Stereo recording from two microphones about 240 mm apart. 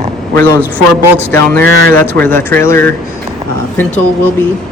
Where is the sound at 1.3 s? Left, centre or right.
Centre.